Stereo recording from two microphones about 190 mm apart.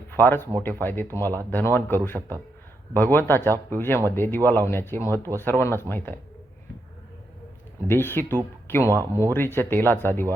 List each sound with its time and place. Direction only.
0.1 s speech: 10° left (ahead or behind)
7.9 s speech: 10° left (ahead or behind)
8.8 s speech: 15° right (ahead or behind)
9.3 s speech: 10° left (ahead or behind)